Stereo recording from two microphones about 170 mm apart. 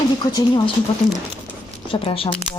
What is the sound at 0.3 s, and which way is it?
Speech, 25° left (ahead or behind).